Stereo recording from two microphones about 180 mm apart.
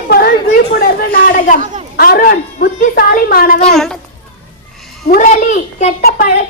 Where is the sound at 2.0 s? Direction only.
55° left (ahead or behind).